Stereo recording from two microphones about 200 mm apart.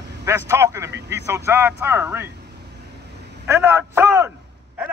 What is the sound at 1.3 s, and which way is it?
Speech, 10° right (ahead or behind).